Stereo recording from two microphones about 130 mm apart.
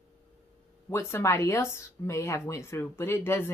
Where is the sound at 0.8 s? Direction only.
20° left (ahead or behind).